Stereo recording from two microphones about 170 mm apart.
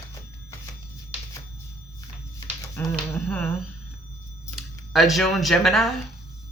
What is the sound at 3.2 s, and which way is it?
Humming, 10° left (ahead or behind).